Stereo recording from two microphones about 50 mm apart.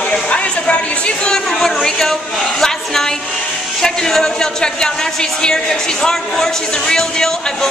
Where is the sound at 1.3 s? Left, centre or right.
Centre.